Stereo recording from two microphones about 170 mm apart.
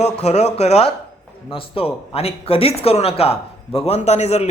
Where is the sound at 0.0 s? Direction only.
40° left (ahead or behind).